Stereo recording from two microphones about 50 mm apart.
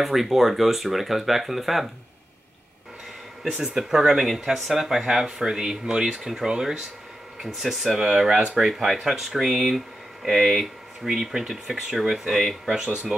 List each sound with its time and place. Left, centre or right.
0.0 s speech: centre
3.6 s speech: centre
12.6 s speech: centre